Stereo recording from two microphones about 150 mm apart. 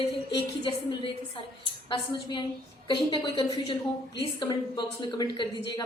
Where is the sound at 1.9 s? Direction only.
30° left (ahead or behind).